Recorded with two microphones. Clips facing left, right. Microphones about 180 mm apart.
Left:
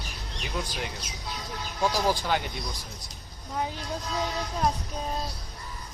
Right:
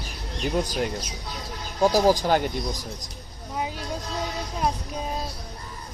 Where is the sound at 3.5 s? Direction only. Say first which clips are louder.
Right 1 dB; 10° right (ahead or behind).